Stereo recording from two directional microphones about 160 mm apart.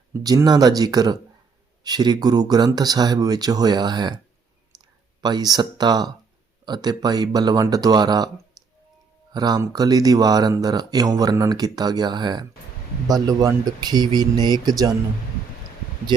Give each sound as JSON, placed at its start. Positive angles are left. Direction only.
{"t": 0.1, "sound": "speech", "side_deg": -20}
{"t": 5.2, "sound": "speech", "side_deg": -25}
{"t": 9.3, "sound": "speech", "side_deg": -25}